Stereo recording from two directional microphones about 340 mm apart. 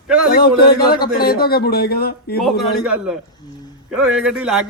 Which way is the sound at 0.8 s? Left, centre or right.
Centre.